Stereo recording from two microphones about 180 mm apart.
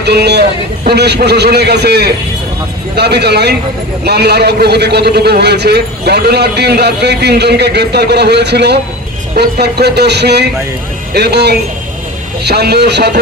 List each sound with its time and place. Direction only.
0.0 s a man's voice: 65° right (ahead or behind)